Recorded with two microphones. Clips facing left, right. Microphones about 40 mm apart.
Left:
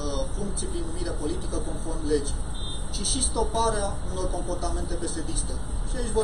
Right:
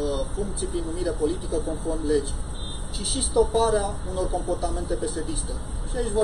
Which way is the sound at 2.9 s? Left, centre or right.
Centre.